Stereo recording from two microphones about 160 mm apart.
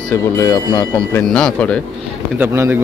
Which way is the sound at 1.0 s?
5° left (ahead or behind).